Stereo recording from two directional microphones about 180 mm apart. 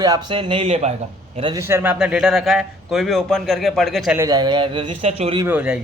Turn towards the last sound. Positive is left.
turn(degrees=-10)  # may be behind; listen again after turning